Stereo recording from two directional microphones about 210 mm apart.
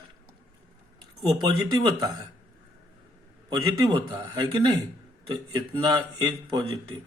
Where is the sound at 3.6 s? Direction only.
20° right (ahead or behind).